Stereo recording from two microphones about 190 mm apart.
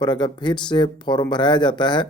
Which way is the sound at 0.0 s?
25° left (ahead or behind).